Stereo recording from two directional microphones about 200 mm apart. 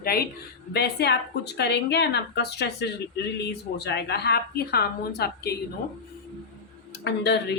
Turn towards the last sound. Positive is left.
turn(degrees=55)  # may be behind; listen again after turning